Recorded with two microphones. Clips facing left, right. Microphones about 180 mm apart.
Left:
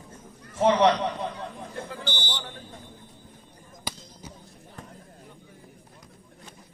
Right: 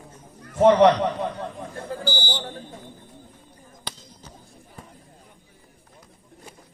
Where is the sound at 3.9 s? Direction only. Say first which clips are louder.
Left 2 dB; 10° left (ahead or behind).